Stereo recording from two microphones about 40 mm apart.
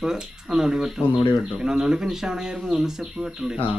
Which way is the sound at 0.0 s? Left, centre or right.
Centre.